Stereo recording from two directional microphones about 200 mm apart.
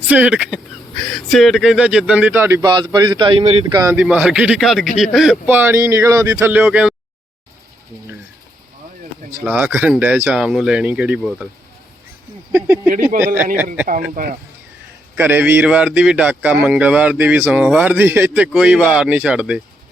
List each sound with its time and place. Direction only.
0.1 s speech: 5° right (ahead or behind); by 3.8 s 25° right (ahead or behind)
3.8 s a man's voice: 5° right (ahead or behind)
6.6 s a man's voice: 5° right (ahead or behind)
9.3 s a man's voice: 10° right (ahead or behind)
12.5 s speech: 10° right (ahead or behind)
14.2 s speech: 45° right (ahead or behind)
15.1 s speech: 10° right (ahead or behind)